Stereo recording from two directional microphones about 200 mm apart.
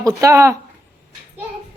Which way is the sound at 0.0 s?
15° right (ahead or behind).